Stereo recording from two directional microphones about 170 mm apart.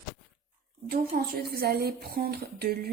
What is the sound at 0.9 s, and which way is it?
Speech, 60° right (ahead or behind).